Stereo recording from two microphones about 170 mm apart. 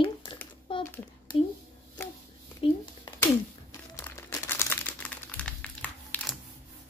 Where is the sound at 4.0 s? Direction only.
15° left (ahead or behind).